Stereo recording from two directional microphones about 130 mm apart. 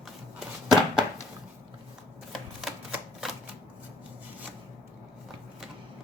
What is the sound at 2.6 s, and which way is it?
Typewriter, 5° right (ahead or behind).